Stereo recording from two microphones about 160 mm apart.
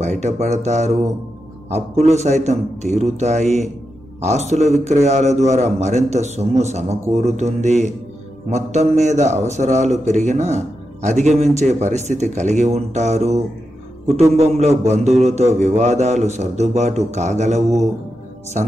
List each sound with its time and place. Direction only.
0.0 s a man's voice: 45° right (ahead or behind)
2.0 s a man's voice: 45° right (ahead or behind)